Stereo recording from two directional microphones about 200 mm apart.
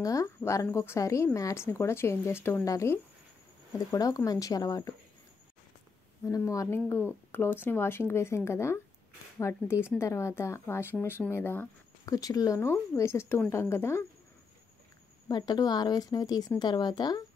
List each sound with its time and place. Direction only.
0.0 s a woman's voice: 15° left (ahead or behind)
6.2 s a woman's voice: 15° left (ahead or behind)
15.2 s speech: 20° left (ahead or behind)